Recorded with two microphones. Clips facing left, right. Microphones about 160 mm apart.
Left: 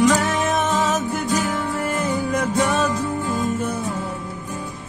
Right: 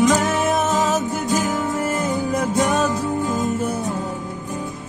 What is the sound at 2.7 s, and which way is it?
Music, centre (ahead or behind).